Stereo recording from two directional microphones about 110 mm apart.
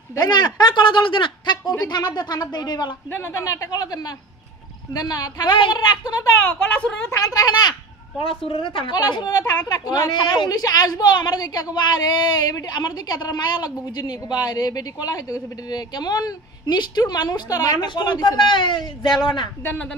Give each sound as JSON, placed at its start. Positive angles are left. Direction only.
{"t": 0.1, "sound": "a woman's voice", "side_deg": 40}
{"t": 3.1, "sound": "a woman's voice", "side_deg": 25}
{"t": 6.7, "sound": "a woman's voice", "side_deg": 15}
{"t": 7.3, "sound": "a woman's voice", "side_deg": 40}
{"t": 8.2, "sound": "a woman's voice", "side_deg": 55}
{"t": 8.9, "sound": "a woman's voice", "side_deg": 40}
{"t": 19.6, "sound": "a woman's voice", "side_deg": 20}